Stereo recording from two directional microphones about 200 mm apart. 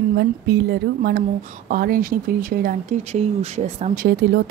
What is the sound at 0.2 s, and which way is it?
Speech, 55° right (ahead or behind).